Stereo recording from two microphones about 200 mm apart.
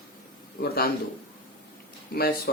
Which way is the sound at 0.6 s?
50° left (ahead or behind).